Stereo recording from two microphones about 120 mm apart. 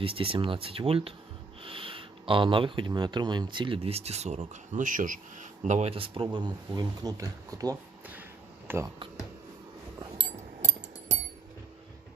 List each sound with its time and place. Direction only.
0.0 s speech: 50° right (ahead or behind)
3.8 s speech: 60° right (ahead or behind); by 5.9 s 80° right
5.9 s speech: 45° right (ahead or behind); by 7.8 s 30° right (ahead or behind)
8.6 s speech: 20° right (ahead or behind)
10.2 s a sound: 70° right (ahead or behind)